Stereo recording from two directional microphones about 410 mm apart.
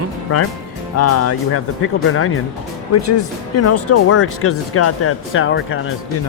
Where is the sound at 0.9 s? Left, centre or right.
Left.